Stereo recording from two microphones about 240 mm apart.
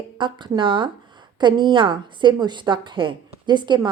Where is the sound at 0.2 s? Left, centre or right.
Centre.